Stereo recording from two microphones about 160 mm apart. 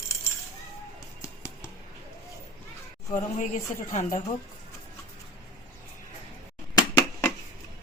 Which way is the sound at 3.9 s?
50° left (ahead or behind).